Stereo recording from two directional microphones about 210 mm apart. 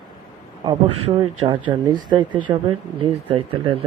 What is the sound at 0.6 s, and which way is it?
A man's voice, 25° right (ahead or behind).